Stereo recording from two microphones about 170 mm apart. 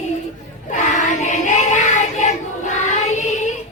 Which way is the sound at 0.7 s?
45° left (ahead or behind).